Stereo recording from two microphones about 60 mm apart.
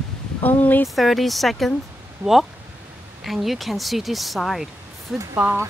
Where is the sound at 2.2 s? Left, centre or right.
Right.